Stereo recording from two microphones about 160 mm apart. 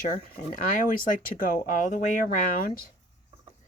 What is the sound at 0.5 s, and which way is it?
Speech, 55° left (ahead or behind).